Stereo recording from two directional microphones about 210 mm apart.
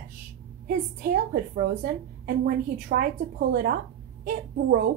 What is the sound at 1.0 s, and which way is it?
A woman's voice, 45° right (ahead or behind).